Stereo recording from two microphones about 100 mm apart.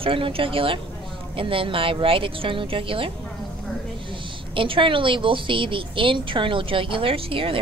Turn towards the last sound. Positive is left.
turn(degrees=-65)  # may be behind; listen again after turning